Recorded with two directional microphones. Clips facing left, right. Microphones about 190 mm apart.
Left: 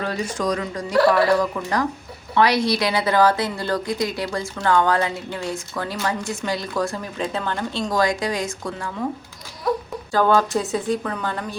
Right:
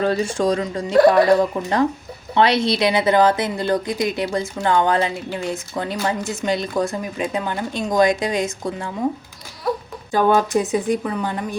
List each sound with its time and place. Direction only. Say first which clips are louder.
0.0 s a woman's voice: right 5 dB; 30° right (ahead or behind)
10.1 s speech: right 1 dB; 15° right (ahead or behind)